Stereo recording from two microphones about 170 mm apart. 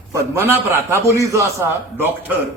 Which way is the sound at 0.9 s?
15° right (ahead or behind).